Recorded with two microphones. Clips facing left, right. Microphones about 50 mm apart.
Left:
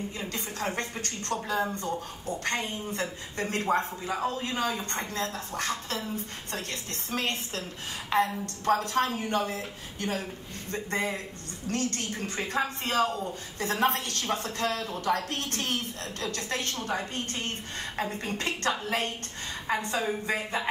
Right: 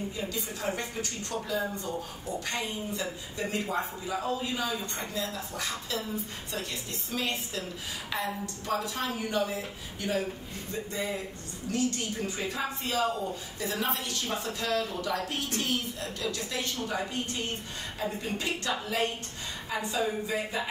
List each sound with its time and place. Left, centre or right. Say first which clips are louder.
0.2 s speech: left 2 dB; left
10.7 s speech: left 3 dB; left